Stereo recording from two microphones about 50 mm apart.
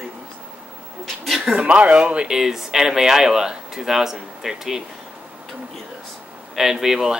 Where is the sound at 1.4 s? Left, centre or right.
Right.